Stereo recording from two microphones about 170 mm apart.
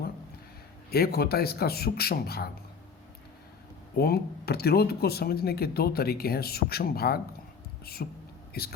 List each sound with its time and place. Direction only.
0.9 s speech: 65° left (ahead or behind)
3.9 s speech: 65° left (ahead or behind)